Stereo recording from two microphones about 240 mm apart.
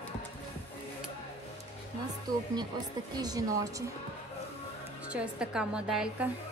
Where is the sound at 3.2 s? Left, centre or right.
Centre.